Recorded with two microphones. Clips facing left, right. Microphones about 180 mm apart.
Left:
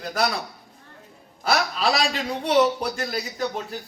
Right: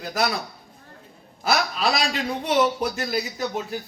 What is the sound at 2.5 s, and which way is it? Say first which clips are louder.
A man's voice: left 2 dB; 5° right (ahead or behind).